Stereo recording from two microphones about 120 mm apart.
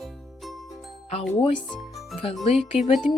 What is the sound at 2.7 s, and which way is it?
Speech, 60° left (ahead or behind).